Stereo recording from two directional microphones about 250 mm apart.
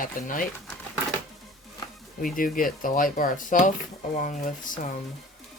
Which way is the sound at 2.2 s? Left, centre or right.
Left.